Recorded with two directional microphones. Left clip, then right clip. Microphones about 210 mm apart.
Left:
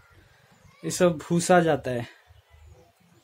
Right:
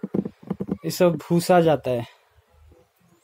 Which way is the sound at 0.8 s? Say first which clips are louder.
Right 3 dB; 20° right (ahead or behind).